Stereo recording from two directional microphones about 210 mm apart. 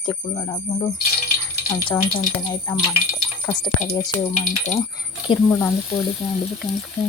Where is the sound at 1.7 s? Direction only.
10° left (ahead or behind).